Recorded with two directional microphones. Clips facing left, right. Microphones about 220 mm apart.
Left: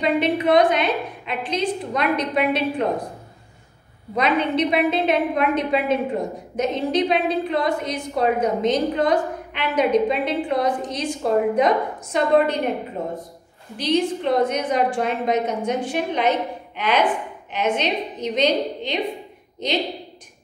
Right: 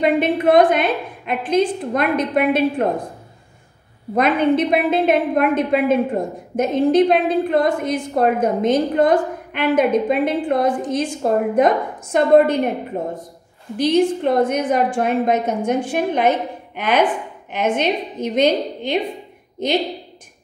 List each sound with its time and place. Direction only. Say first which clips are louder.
0.0 s a woman's voice: right 3 dB; 50° right (ahead or behind)
4.1 s a woman's voice: right 5 dB; 50° right (ahead or behind)
13.7 s a woman's voice: right 5 dB; 50° right (ahead or behind)